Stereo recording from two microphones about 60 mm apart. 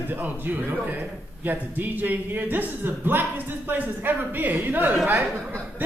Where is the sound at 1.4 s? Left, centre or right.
Right.